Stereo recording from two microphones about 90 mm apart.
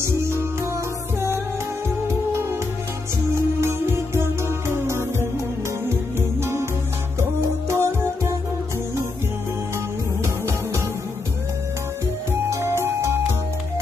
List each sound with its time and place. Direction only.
0.0 s music: 30° right (ahead or behind)
3.6 s music: 30° right (ahead or behind)
10.2 s music: 30° right (ahead or behind)
12.4 s music: 30° right (ahead or behind)